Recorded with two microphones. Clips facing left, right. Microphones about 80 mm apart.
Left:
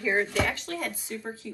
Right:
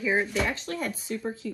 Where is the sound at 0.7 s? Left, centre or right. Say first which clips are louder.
Right 2 dB; right.